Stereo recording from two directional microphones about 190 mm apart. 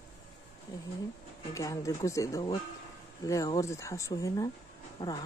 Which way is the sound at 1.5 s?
15° left (ahead or behind).